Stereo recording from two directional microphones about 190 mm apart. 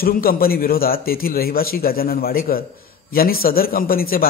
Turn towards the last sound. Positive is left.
turn(degrees=50)  # may be behind; listen again after turning